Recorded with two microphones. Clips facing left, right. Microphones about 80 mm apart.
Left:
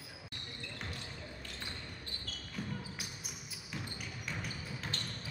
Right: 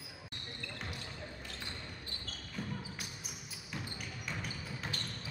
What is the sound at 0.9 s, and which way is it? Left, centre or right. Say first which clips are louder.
Basketball bounce: right 1 dB; centre.